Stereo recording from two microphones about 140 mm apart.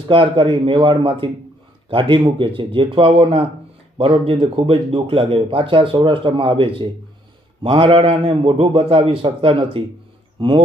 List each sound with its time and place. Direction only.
0.1 s speech: 40° right (ahead or behind)